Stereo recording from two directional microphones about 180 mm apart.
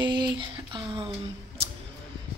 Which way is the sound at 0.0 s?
25° right (ahead or behind).